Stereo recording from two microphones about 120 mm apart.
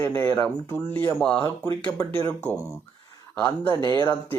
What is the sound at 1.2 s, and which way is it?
Speech, 10° left (ahead or behind).